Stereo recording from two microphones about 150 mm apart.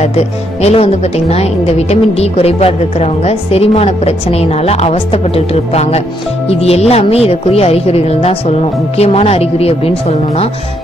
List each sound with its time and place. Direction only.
0.0 s speech: 45° left (ahead or behind)